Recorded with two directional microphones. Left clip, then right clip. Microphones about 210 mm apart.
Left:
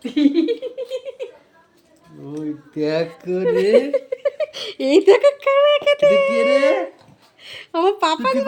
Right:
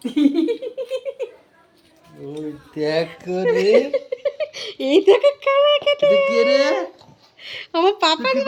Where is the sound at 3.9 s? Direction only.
15° left (ahead or behind).